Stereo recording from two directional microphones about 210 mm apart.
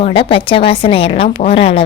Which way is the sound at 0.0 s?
25° left (ahead or behind).